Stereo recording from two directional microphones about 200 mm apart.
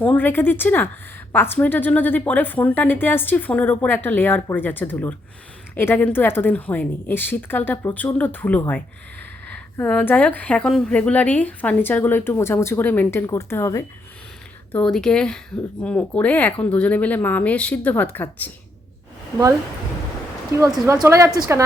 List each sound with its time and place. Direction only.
0.0 s speech: 10° left (ahead or behind)
20.8 s a woman's voice: 15° right (ahead or behind)